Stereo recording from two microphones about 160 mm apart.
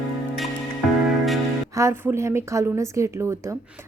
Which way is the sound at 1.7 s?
15° right (ahead or behind).